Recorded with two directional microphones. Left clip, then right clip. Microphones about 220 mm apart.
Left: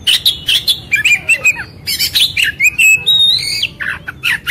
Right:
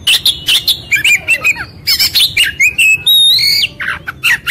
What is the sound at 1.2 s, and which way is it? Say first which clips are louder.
Bird: even; 20° right (ahead or behind).